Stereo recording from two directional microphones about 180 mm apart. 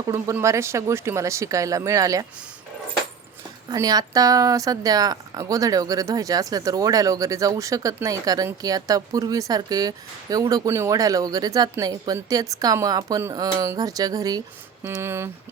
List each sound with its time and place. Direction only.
0.0 s speech: 15° right (ahead or behind)
3.7 s a woman's voice: 20° right (ahead or behind)